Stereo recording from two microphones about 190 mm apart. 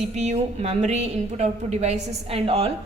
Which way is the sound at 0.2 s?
35° right (ahead or behind).